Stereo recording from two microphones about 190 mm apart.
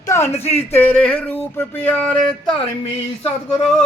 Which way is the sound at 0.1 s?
15° left (ahead or behind).